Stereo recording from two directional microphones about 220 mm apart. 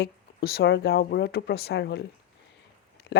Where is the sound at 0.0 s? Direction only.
45° left (ahead or behind).